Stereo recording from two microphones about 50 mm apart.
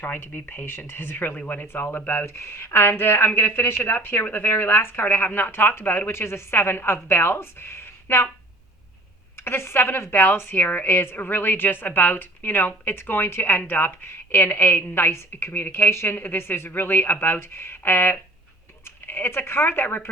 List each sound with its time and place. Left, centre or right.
0.0 s speech: left
1.6 s a woman's voice: left
6.1 s a woman's voice: left
9.4 s a woman's voice: left
15.9 s speech: left
16.1 s a woman's voice: left